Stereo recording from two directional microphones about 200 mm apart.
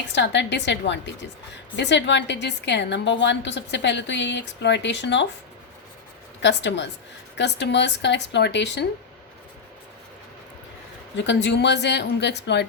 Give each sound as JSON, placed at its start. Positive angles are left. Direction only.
{"t": 0.1, "sound": "a woman's voice", "side_deg": 60}
{"t": 6.4, "sound": "a woman's voice", "side_deg": 60}
{"t": 11.2, "sound": "a woman's voice", "side_deg": 60}